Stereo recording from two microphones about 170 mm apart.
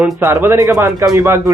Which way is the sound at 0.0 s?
15° right (ahead or behind).